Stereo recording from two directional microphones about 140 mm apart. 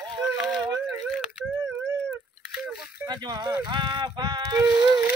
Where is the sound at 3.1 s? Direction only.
30° right (ahead or behind).